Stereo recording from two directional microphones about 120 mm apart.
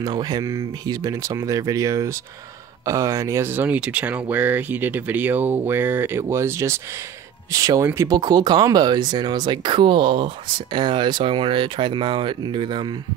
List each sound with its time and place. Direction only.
0.0 s speech: 35° right (ahead or behind)